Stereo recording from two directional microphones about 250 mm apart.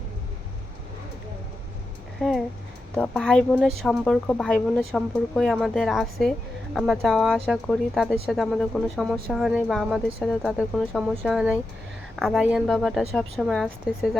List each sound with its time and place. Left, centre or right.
2.2 s speech: centre